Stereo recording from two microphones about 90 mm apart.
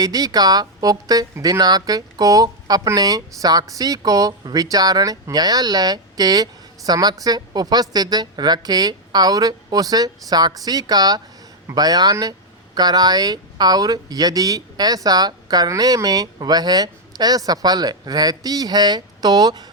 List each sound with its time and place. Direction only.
0.0 s speech: 45° right (ahead or behind)